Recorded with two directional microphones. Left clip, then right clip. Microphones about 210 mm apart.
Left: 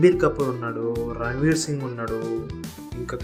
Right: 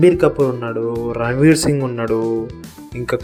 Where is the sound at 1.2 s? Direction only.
25° right (ahead or behind).